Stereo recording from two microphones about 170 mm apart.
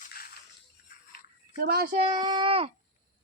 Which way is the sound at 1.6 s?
60° right (ahead or behind).